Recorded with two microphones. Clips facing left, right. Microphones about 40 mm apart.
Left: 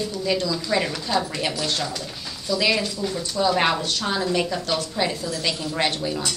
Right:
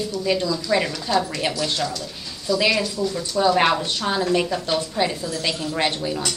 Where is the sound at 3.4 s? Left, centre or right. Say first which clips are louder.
Right 3 dB; centre.